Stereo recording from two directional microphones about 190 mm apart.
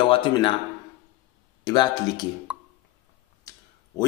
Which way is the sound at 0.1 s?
25° left (ahead or behind).